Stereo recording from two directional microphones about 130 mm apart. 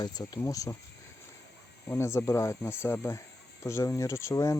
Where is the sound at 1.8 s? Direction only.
20° left (ahead or behind).